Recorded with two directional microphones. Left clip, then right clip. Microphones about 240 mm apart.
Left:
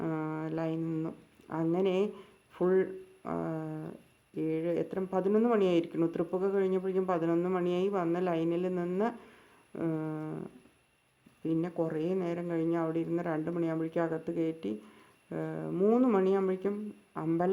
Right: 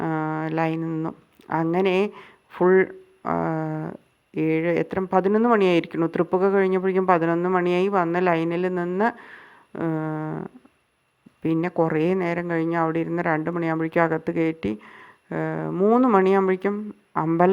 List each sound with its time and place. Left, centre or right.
0.0 s speech: centre
3.4 s a sound: right
4.4 s speech: right